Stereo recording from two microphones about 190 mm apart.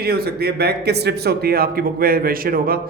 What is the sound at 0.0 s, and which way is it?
A man's voice, 55° right (ahead or behind).